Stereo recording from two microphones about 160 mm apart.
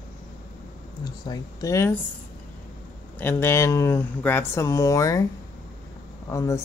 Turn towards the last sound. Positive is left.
turn(degrees=20)  # may be behind; listen again after turning